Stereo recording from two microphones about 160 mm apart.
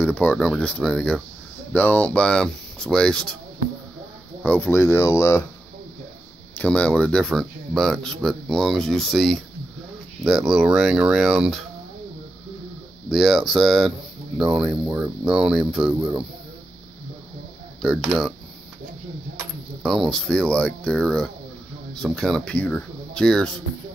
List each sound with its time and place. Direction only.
0.0 s speech: 10° left (ahead or behind)
4.4 s speech: 10° left (ahead or behind)
6.6 s speech: 5° left (ahead or behind)
13.1 s speech: centre (ahead or behind)
17.8 s speech: centre (ahead or behind)
19.8 s speech: centre (ahead or behind)